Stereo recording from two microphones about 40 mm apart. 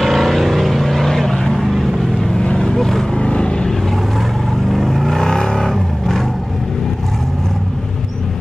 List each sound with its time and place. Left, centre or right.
0.0 s vehicle: centre
2.0 s boat: centre
2.5 s vehicle: centre
3.2 s vehicle: left
4.6 s vehicle: centre